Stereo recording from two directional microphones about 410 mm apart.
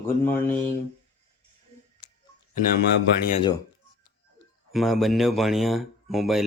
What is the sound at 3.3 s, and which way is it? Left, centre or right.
Speech, centre.